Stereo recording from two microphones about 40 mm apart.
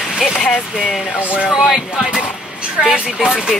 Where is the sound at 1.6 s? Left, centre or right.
Centre.